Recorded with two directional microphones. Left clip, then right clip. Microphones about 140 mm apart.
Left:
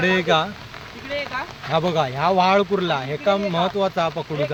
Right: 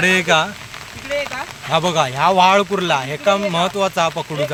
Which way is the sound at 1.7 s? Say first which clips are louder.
Right 4 dB; 10° right (ahead or behind).